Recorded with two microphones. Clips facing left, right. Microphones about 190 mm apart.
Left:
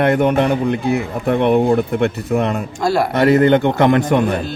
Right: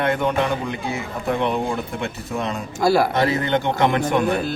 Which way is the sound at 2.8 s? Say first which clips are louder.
Even; 5° right (ahead or behind).